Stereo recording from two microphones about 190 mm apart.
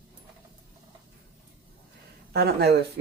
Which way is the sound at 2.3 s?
60° right (ahead or behind).